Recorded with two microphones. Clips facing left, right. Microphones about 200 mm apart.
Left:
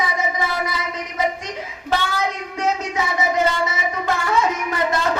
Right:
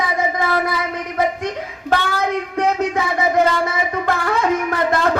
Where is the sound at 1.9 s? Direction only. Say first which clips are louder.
Right 3 dB; 55° right (ahead or behind).